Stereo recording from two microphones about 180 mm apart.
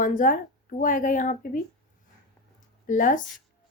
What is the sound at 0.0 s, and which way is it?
A woman's voice, 50° left (ahead or behind).